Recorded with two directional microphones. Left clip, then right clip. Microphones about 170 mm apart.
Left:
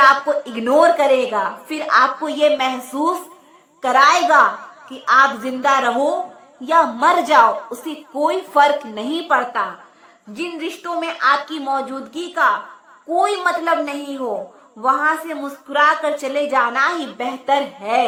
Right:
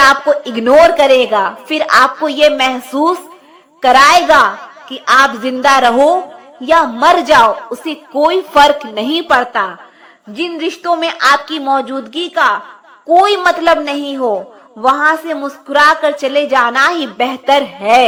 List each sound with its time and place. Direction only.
0.0 s a woman's voice: 30° right (ahead or behind)